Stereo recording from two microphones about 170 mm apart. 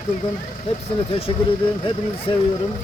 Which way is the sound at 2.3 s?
30° left (ahead or behind).